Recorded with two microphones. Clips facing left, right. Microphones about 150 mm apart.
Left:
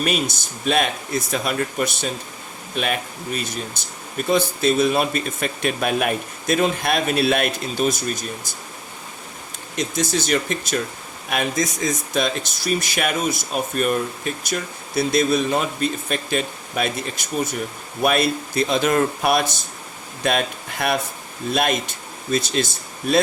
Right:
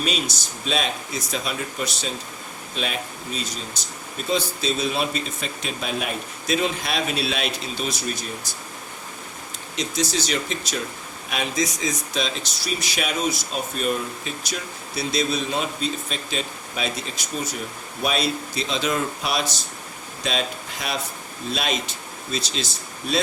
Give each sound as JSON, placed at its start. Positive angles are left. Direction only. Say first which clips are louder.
{"t": 0.0, "sound": "speech", "louder": "left 4 dB", "side_deg": 55}
{"t": 9.7, "sound": "speech", "louder": "left 3 dB", "side_deg": 50}